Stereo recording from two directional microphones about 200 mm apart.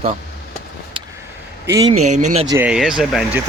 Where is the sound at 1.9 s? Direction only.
35° right (ahead or behind).